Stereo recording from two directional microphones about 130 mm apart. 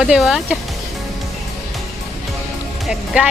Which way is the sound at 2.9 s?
5° right (ahead or behind).